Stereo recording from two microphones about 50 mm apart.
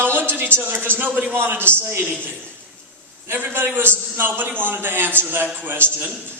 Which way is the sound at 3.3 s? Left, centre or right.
Right.